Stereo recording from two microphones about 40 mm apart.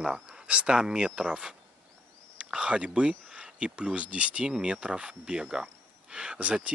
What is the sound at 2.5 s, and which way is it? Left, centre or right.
Speech, right.